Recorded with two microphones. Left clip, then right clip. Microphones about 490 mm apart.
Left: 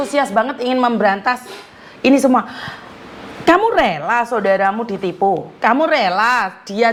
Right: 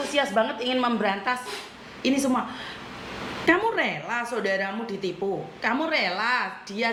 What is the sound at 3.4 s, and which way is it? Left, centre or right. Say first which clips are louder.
A woman's voice: left 10 dB; left.